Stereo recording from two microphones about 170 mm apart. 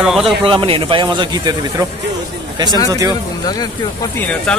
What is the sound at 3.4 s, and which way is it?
Speech, 25° left (ahead or behind).